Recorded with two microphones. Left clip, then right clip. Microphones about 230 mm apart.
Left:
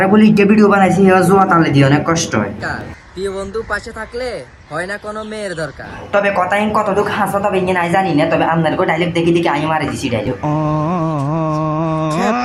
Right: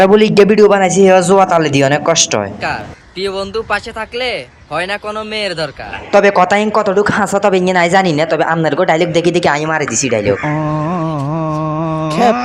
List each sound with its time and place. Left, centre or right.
0.1 s a man's voice: right
6.1 s a man's voice: right
10.4 s a sound: centre